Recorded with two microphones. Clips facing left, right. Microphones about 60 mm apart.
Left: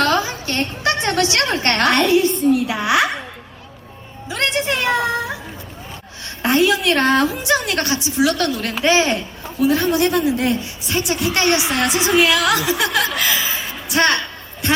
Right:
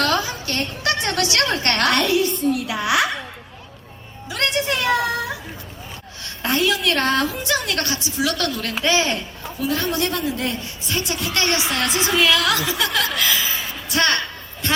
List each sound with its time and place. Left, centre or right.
0.0 s a woman's voice: left
4.3 s music: left
6.4 s a woman's voice: left
12.2 s a woman's voice: left